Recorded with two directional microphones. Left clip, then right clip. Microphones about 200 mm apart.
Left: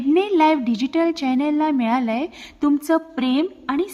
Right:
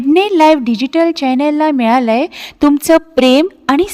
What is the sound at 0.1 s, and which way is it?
A woman's voice, 45° right (ahead or behind).